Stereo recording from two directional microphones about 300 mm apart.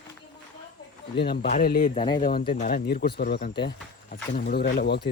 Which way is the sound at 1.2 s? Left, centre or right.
Left.